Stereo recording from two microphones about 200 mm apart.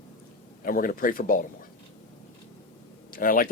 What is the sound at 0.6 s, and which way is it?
Speech, 45° left (ahead or behind).